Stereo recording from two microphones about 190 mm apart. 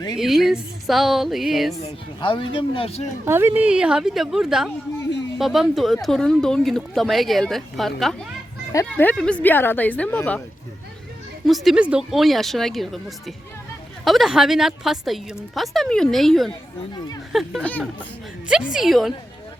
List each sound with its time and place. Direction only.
0.2 s speech: centre (ahead or behind)
1.7 s speech: 30° left (ahead or behind)
3.2 s speech: 10° right (ahead or behind)
8.7 s speech: 10° left (ahead or behind)
11.4 s speech: centre (ahead or behind)